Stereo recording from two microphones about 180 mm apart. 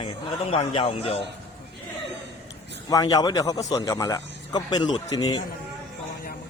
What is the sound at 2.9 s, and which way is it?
Speech, 20° left (ahead or behind).